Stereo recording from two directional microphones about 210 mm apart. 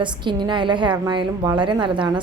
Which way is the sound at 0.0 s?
20° right (ahead or behind).